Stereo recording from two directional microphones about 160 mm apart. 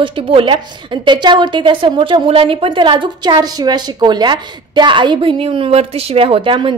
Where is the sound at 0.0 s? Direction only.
35° right (ahead or behind).